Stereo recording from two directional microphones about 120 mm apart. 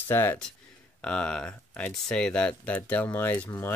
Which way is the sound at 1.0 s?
5° left (ahead or behind).